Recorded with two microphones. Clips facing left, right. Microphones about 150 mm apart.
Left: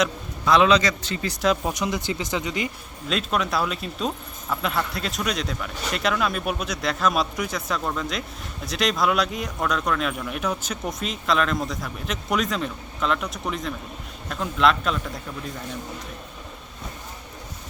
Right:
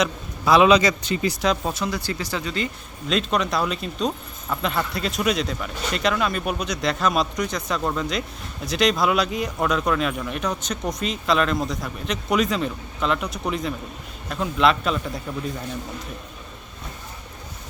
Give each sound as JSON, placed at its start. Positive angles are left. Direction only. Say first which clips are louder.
{"t": 0.0, "sound": "a man's voice", "louder": "right 1 dB", "side_deg": -10}
{"t": 1.4, "sound": "speech", "louder": "left 5 dB", "side_deg": 5}
{"t": 1.7, "sound": "speech", "louder": "left 1 dB", "side_deg": 20}
{"t": 3.1, "sound": "speech", "louder": "right 2 dB", "side_deg": 0}